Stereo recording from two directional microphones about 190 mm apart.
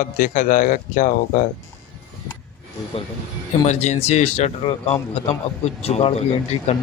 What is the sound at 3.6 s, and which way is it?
Speech, 40° left (ahead or behind).